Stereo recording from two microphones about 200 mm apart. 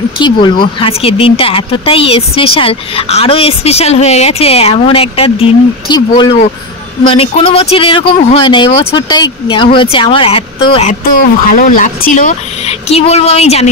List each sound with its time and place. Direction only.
0.2 s speech: 25° left (ahead or behind)
10.9 s speech: 40° left (ahead or behind)